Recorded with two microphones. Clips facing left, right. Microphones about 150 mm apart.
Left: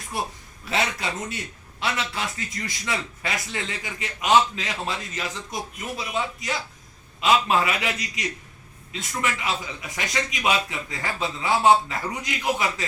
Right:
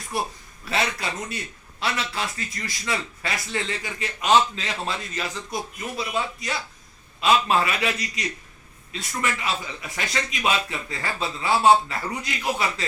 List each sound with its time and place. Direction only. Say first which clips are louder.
0.6 s a man's voice: even; 20° left (ahead or behind)